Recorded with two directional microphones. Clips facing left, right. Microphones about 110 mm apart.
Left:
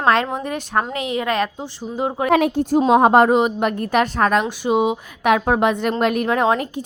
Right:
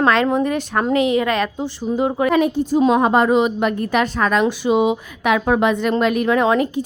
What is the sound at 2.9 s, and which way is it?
A woman's voice, 65° left (ahead or behind).